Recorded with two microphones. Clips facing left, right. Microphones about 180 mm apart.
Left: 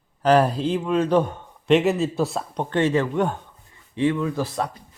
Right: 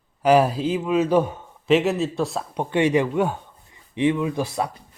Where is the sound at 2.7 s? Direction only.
15° right (ahead or behind).